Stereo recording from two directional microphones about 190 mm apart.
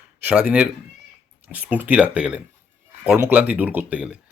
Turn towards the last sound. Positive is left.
turn(degrees=-5)  # may be behind; listen again after turning